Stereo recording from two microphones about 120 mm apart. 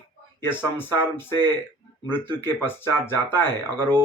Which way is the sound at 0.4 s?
15° left (ahead or behind).